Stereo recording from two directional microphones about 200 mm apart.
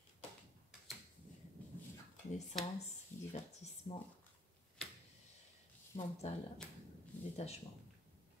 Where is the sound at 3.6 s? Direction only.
35° left (ahead or behind).